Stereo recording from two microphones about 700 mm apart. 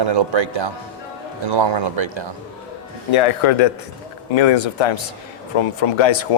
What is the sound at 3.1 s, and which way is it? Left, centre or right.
A man's voice, left.